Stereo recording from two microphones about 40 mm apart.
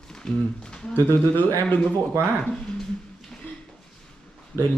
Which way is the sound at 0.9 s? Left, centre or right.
Left.